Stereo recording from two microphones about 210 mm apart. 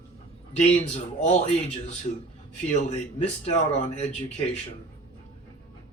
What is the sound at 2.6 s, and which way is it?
Speech, 35° left (ahead or behind).